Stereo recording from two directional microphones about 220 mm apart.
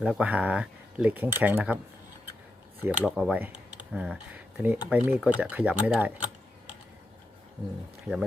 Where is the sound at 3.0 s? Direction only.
5° left (ahead or behind).